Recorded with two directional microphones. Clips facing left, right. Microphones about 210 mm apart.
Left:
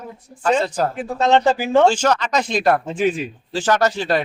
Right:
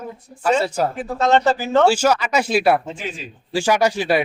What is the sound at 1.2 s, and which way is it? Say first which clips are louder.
Speech: left 1 dB; 15° left (ahead or behind).